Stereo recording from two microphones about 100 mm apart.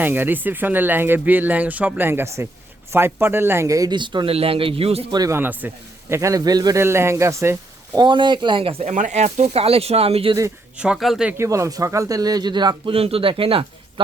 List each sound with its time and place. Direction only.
0.0 s speech: 20° right (ahead or behind)
3.9 s speech: 50° right (ahead or behind)
4.3 s speech: 70° right (ahead or behind)
5.3 s speech: 20° right (ahead or behind)
6.1 s speech: 35° right (ahead or behind)
6.7 s speech: 25° right (ahead or behind)
7.9 s speech: 50° right (ahead or behind)
9.1 s speech: 90° right
10.8 s speech: 5° right (ahead or behind)
11.3 s speech: 30° right (ahead or behind); by 12.9 s 50° right (ahead or behind)
12.9 s speech: 75° right (ahead or behind)